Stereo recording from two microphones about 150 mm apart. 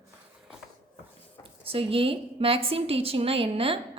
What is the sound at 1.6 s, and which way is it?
A woman's voice, 40° right (ahead or behind).